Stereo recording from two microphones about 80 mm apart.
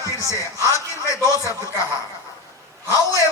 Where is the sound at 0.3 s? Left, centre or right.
Left.